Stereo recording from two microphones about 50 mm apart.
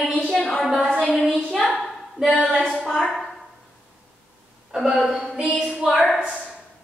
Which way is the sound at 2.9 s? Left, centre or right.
Centre.